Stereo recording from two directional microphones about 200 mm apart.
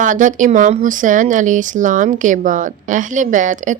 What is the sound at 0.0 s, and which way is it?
Speech, 40° right (ahead or behind).